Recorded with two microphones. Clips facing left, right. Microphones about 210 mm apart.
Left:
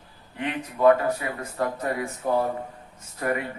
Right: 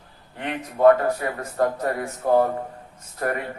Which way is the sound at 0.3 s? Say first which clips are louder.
Right 2 dB; 45° right (ahead or behind).